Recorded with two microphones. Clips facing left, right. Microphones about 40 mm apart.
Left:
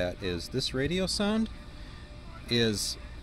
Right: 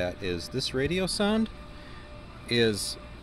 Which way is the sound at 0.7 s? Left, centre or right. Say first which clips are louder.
Right 3 dB; centre.